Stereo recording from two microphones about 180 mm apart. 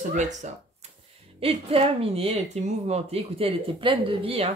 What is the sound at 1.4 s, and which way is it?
Speech, 30° right (ahead or behind).